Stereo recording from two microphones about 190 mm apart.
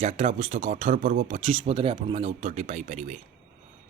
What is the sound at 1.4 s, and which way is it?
Speech, 30° right (ahead or behind).